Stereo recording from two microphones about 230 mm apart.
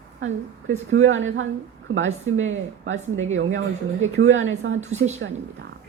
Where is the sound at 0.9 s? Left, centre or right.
Right.